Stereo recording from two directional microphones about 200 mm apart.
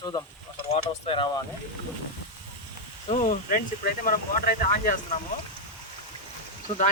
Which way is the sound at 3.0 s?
40° left (ahead or behind).